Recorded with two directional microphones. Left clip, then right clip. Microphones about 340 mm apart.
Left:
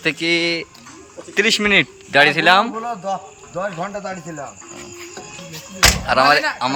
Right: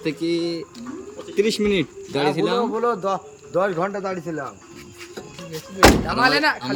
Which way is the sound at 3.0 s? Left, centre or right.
Centre.